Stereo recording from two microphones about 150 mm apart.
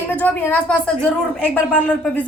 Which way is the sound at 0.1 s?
10° left (ahead or behind).